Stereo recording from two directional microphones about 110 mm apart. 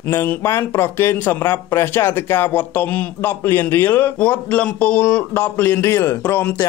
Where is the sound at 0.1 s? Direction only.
20° left (ahead or behind).